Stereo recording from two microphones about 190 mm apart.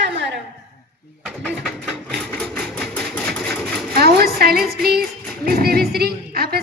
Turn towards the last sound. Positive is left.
turn(degrees=-55)  # may be behind; listen again after turning